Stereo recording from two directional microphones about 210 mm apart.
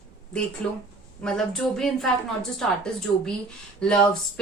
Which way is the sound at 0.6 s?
5° left (ahead or behind).